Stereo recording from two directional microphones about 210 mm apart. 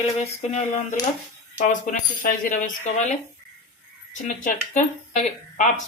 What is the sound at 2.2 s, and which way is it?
Speech, 40° left (ahead or behind).